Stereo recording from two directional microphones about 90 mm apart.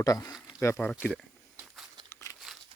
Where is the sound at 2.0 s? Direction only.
35° left (ahead or behind).